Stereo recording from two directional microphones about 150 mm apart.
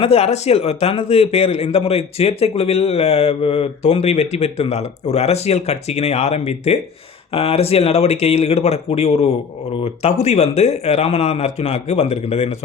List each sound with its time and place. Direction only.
0.0 s a man's voice: 40° left (ahead or behind)